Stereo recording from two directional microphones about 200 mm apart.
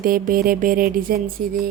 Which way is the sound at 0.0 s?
45° right (ahead or behind).